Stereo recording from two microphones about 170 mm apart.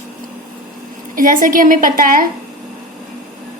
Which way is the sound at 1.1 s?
50° right (ahead or behind).